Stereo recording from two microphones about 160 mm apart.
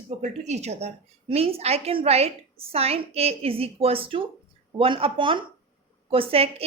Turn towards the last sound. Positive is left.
turn(degrees=-35)  # may be behind; listen again after turning